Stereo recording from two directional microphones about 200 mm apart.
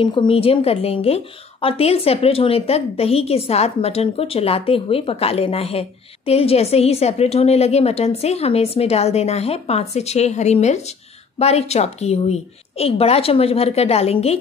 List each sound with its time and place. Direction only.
0.0 s a woman's voice: 25° left (ahead or behind)